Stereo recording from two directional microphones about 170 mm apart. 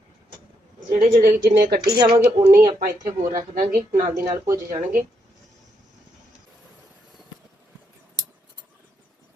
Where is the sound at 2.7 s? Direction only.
50° right (ahead or behind).